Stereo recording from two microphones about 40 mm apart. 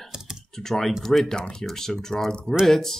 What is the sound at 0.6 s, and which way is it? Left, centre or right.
Speech, centre.